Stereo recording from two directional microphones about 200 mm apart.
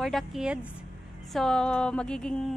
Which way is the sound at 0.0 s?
Centre (ahead or behind).